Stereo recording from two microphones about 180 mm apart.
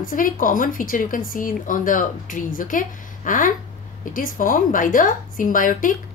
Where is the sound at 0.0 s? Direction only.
50° left (ahead or behind).